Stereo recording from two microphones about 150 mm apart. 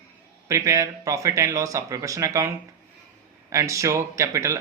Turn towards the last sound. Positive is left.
turn(degrees=-20)  # may be behind; listen again after turning